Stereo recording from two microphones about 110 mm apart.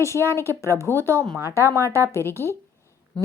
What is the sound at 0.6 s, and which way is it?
Speech, 25° left (ahead or behind).